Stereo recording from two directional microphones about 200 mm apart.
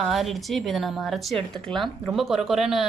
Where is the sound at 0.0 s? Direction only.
Centre (ahead or behind).